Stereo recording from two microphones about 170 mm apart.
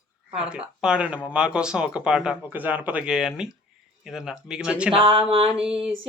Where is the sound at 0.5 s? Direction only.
5° right (ahead or behind).